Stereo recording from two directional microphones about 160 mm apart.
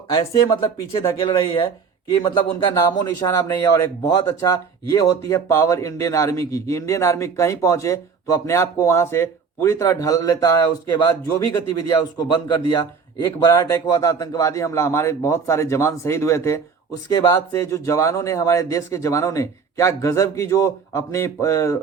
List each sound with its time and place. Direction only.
0.1 s a man's voice: 25° left (ahead or behind)